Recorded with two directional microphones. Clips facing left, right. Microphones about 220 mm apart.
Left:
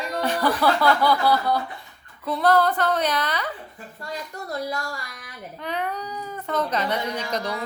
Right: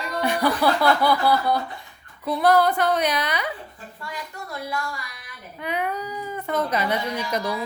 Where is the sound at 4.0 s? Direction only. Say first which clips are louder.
Left 2 dB; 40° left (ahead or behind).